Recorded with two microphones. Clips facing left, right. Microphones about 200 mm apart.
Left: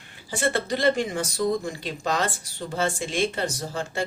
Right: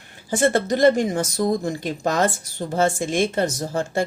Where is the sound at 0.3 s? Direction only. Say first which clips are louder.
Right 6 dB; 45° right (ahead or behind).